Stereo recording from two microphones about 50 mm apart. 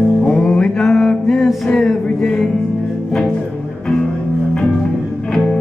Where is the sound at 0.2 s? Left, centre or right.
Centre.